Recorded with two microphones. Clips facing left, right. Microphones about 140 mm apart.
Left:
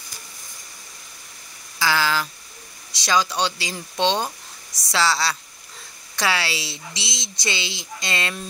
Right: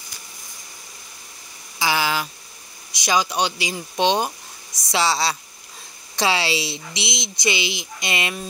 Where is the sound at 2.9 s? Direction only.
15° right (ahead or behind).